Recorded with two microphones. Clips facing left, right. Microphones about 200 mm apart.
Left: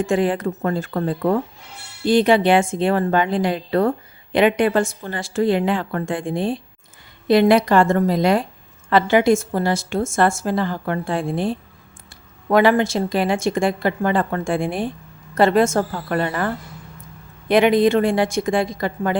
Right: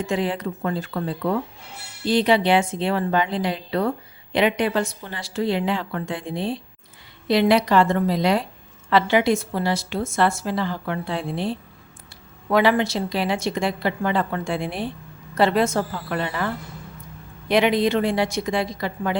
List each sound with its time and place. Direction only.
0.0 s a woman's voice: 50° left (ahead or behind)
17.5 s a woman's voice: 50° left (ahead or behind)